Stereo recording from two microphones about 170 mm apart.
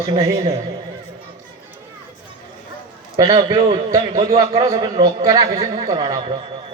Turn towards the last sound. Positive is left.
turn(degrees=-25)  # may be behind; listen again after turning